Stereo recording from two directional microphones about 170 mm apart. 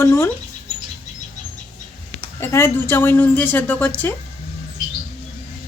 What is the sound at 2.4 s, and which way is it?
A woman's voice, 15° left (ahead or behind).